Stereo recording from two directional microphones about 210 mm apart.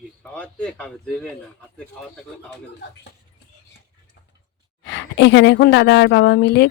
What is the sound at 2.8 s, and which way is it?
Speech, 55° left (ahead or behind).